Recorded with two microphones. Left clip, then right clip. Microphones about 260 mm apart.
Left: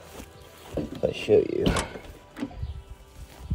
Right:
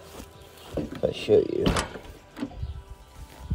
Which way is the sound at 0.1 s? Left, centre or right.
Centre.